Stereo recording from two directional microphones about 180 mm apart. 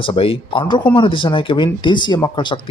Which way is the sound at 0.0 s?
30° left (ahead or behind).